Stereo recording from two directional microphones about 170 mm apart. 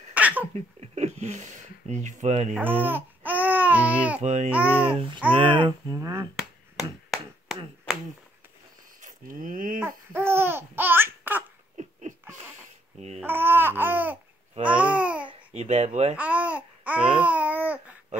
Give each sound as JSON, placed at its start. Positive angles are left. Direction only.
{"t": 0.1, "sound": "a sound", "side_deg": -10}
{"t": 0.7, "sound": "speech", "side_deg": -40}
{"t": 2.5, "sound": "babbling", "side_deg": -10}
{"t": 4.2, "sound": "speech", "side_deg": -45}
{"t": 4.5, "sound": "babbling", "side_deg": -10}
{"t": 5.3, "sound": "speech", "side_deg": -30}
{"t": 6.3, "sound": "finger snapping", "side_deg": 0}
{"t": 9.0, "sound": "speech", "side_deg": -50}
{"t": 9.8, "sound": "laughter", "side_deg": -15}
{"t": 11.8, "sound": "a sound", "side_deg": -45}
{"t": 13.2, "sound": "babbling", "side_deg": -10}
{"t": 15.2, "sound": "speech", "side_deg": -40}
{"t": 16.2, "sound": "babbling", "side_deg": -10}